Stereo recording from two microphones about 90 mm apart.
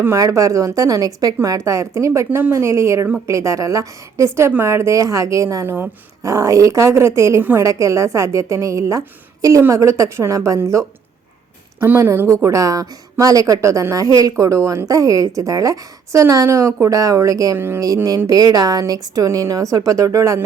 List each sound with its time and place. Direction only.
0.0 s a woman's voice: 30° right (ahead or behind)